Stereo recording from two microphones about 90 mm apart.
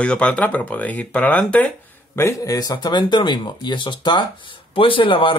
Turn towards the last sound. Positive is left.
turn(degrees=70)  # may be behind; listen again after turning